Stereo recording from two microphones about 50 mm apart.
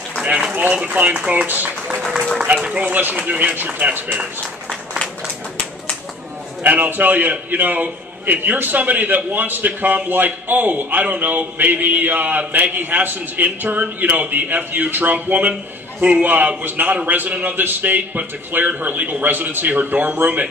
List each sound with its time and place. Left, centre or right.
0.9 s a man's voice: right
2.5 s speech: right
2.8 s a man's voice: right
6.6 s a man's voice: right